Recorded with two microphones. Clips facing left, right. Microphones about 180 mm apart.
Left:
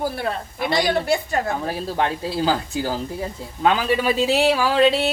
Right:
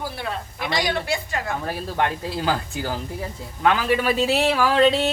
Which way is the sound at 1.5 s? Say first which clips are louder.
Left 3 dB; 20° left (ahead or behind).